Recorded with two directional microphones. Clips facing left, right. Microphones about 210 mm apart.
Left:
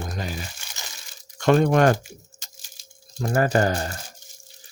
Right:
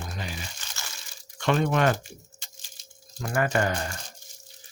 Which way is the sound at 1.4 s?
40° left (ahead or behind).